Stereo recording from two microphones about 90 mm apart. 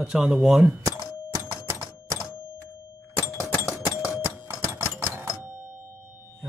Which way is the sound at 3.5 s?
40° left (ahead or behind).